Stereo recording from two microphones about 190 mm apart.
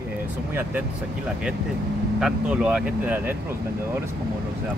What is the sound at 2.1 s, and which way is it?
Speech, 5° right (ahead or behind).